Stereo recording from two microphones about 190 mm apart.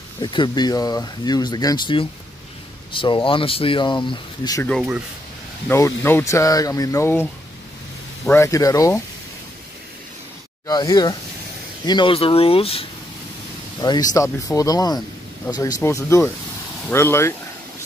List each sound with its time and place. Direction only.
0.2 s speech: 25° left (ahead or behind)
5.7 s speech: 15° left (ahead or behind)
8.3 s speech: 15° left (ahead or behind)
10.7 s speech: 20° left (ahead or behind)
13.7 s speech: 20° left (ahead or behind)